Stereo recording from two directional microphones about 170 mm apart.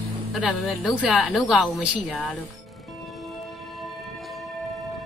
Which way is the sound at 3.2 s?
Centre (ahead or behind).